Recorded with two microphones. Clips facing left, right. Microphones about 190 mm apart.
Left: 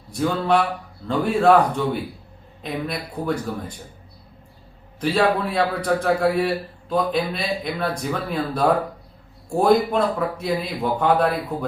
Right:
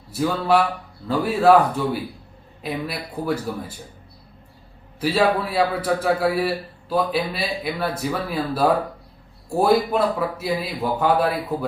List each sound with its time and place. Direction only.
0.1 s a man's voice: 5° right (ahead or behind)
4.9 s a man's voice: 5° right (ahead or behind)